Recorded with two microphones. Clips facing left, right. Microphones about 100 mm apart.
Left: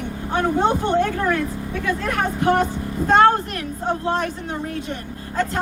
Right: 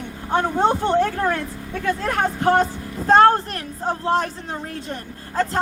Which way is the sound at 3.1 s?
35° right (ahead or behind).